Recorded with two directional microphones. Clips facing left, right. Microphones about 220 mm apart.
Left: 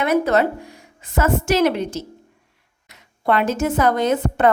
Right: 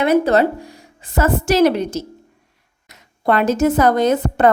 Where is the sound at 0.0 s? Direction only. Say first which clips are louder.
Right 3 dB; 30° right (ahead or behind).